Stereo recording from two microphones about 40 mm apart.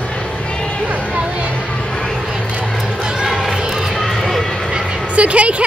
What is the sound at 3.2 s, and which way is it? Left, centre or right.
Music, centre.